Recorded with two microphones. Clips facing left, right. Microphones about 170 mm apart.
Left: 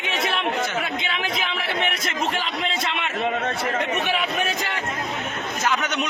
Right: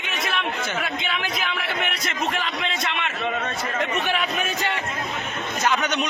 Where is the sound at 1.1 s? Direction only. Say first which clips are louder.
Left 1 dB; 25° left (ahead or behind).